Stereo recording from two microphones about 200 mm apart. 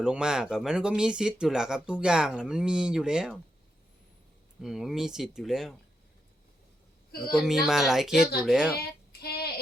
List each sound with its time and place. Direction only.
0.0 s speech: 5° right (ahead or behind)
4.6 s speech: centre (ahead or behind)
7.3 s speech: centre (ahead or behind)
9.2 s a sound: 50° left (ahead or behind)